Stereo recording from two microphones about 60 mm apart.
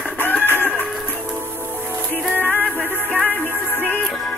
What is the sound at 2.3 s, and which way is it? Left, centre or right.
Music, right.